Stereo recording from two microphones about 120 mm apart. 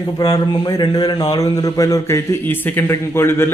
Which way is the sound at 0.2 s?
35° left (ahead or behind).